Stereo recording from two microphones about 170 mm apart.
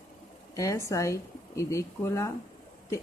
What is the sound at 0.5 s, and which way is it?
Speech, 15° left (ahead or behind).